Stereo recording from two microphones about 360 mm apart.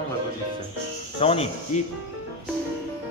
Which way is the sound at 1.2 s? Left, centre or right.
Centre.